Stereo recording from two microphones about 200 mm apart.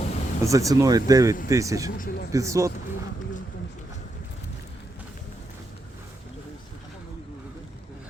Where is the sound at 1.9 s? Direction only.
50° left (ahead or behind).